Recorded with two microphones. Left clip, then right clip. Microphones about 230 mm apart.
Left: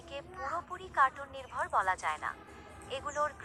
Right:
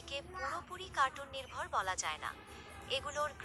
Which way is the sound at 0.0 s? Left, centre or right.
Centre.